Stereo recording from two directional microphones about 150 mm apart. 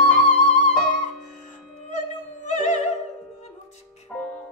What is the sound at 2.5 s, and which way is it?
Opera, 50° left (ahead or behind).